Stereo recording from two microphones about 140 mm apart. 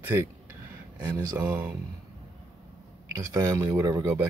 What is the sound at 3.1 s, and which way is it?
Speech, 25° right (ahead or behind).